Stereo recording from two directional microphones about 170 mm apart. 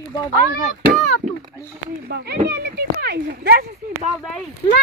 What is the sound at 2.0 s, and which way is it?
Speech, 75° right (ahead or behind).